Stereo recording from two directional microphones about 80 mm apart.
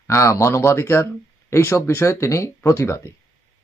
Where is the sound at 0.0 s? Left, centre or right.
Left.